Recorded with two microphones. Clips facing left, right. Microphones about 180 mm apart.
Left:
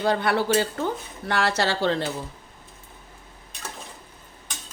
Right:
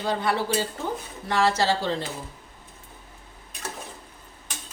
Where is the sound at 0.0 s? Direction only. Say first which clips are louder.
Left 3 dB; 65° left (ahead or behind).